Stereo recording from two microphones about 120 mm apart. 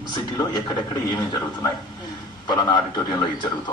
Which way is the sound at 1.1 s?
40° left (ahead or behind).